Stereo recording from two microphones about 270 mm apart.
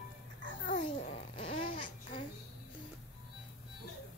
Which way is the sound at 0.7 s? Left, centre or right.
Left.